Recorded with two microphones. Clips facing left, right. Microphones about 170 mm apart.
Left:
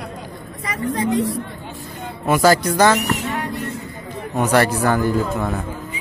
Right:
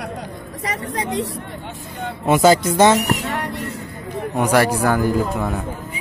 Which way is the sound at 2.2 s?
20° right (ahead or behind).